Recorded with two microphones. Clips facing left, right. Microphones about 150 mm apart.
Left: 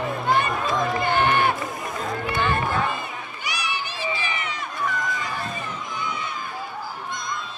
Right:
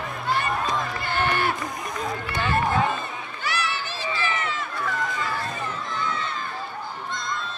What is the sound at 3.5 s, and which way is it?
Run, 15° left (ahead or behind).